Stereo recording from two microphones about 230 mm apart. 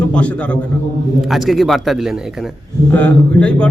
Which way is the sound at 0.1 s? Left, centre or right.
Centre.